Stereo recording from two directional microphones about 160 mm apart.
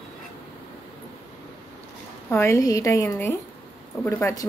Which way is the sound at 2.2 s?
15° left (ahead or behind).